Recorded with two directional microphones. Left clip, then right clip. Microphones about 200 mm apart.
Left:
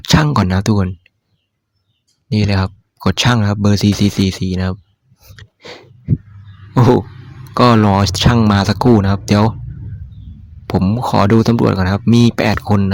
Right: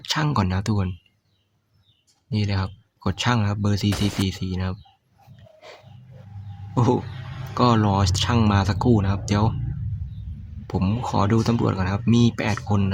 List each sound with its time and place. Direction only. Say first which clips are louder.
0.0 s a sound: left 10 dB; 35° left (ahead or behind)
0.3 s speech: left 9 dB; 35° left (ahead or behind)
2.3 s speech: left 10 dB; 30° left (ahead or behind)
5.4 s snort: left 10 dB; 35° left (ahead or behind)
6.7 s a sound: left 10 dB; 35° left (ahead or behind)
7.5 s speech: left 9 dB; 35° left (ahead or behind)
11.0 s speech: left 10 dB; 35° left (ahead or behind)